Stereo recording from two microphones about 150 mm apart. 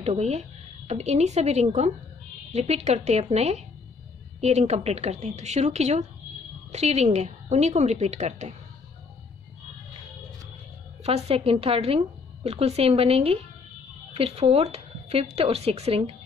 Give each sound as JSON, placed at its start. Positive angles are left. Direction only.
{"t": 0.0, "sound": "speech", "side_deg": -45}
{"t": 11.1, "sound": "a woman's voice", "side_deg": -45}